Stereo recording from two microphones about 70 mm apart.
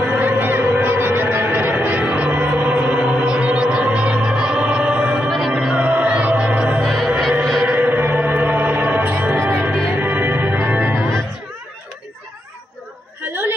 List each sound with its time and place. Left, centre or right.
0.0 s music: right
9.4 s music: right
13.3 s a sound: right